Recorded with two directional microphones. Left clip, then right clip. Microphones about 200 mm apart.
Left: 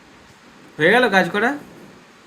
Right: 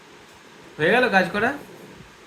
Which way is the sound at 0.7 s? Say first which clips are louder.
Left 3 dB; 35° left (ahead or behind).